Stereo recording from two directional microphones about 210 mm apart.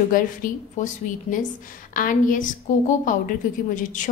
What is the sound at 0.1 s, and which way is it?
A woman's voice, 40° left (ahead or behind).